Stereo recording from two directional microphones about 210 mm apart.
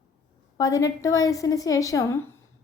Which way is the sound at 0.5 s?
15° left (ahead or behind).